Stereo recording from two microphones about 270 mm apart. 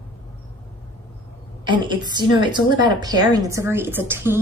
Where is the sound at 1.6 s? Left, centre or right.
Centre.